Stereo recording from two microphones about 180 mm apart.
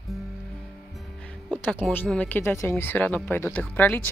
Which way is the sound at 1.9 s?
10° left (ahead or behind).